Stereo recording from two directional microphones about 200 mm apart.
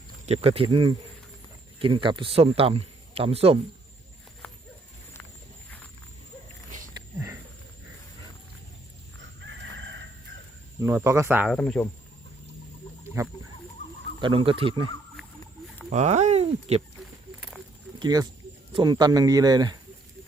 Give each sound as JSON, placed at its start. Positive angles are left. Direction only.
{"t": 0.3, "sound": "speech", "side_deg": -30}
{"t": 4.4, "sound": "dog", "side_deg": 5}
{"t": 9.4, "sound": "chicken", "side_deg": -65}
{"t": 10.8, "sound": "speech", "side_deg": -15}
{"t": 11.5, "sound": "speech", "side_deg": 5}
{"t": 14.2, "sound": "speech", "side_deg": -25}
{"t": 15.9, "sound": "speech", "side_deg": -35}
{"t": 18.0, "sound": "speech", "side_deg": -20}